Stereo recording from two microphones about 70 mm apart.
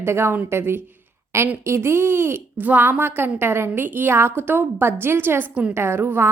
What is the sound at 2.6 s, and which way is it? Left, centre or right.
A woman's voice, right.